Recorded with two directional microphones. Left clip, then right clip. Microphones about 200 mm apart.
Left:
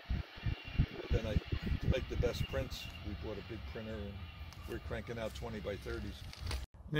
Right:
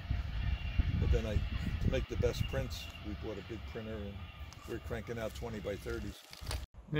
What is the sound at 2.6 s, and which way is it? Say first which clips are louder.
Speech: even; centre (ahead or behind).